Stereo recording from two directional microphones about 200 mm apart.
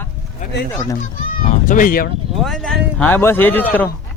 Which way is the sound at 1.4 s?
40° left (ahead or behind).